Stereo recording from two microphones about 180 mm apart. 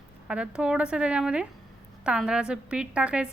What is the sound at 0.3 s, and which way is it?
A woman's voice, 5° right (ahead or behind).